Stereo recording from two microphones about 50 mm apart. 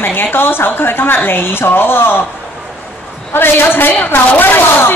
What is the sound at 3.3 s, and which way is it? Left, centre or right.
Speech, left.